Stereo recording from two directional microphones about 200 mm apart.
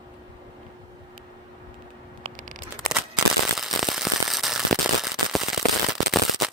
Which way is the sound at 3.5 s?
Centre (ahead or behind).